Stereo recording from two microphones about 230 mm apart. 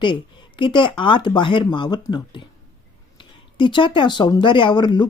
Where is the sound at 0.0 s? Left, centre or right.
Left.